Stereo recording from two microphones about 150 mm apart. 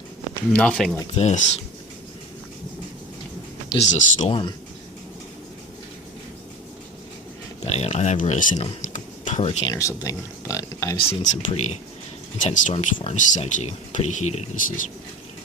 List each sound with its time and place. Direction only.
0.5 s speech: 5° left (ahead or behind)
1.1 s speech: 45° left (ahead or behind)
3.8 s speech: 50° left (ahead or behind)
4.3 s speech: 35° left (ahead or behind)
7.6 s speech: 45° left (ahead or behind)
8.9 s a sound: 50° left (ahead or behind)
9.7 s speech: 20° left (ahead or behind)
11.1 s speech: 50° left (ahead or behind)